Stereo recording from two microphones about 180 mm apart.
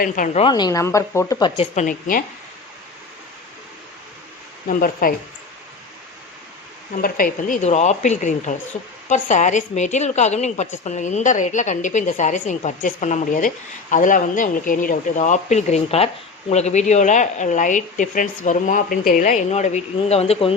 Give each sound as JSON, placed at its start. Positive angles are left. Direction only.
{"t": 0.3, "sound": "speech", "side_deg": 25}
{"t": 1.7, "sound": "a woman's voice", "side_deg": 45}
{"t": 4.7, "sound": "a woman's voice", "side_deg": 50}
{"t": 6.9, "sound": "a woman's voice", "side_deg": 50}